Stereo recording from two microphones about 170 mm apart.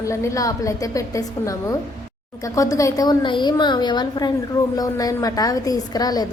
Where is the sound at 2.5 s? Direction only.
20° left (ahead or behind).